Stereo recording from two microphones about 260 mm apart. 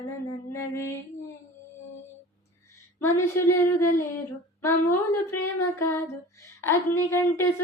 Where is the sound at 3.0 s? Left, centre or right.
Centre.